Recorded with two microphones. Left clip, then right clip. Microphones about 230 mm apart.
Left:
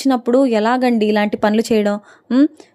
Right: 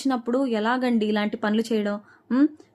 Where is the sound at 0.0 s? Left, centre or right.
Left.